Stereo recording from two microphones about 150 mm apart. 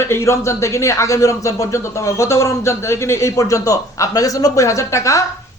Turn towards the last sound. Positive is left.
turn(degrees=20)  # may be behind; listen again after turning